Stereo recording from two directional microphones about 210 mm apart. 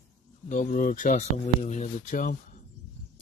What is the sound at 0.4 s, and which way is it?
Speech, 35° left (ahead or behind).